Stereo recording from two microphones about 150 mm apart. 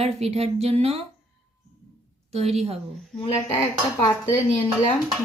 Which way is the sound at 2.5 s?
45° right (ahead or behind).